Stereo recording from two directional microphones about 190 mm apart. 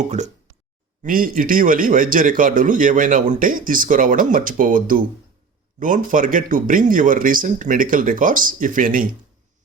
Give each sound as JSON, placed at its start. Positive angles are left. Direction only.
{"t": 0.0, "sound": "speech", "side_deg": -40}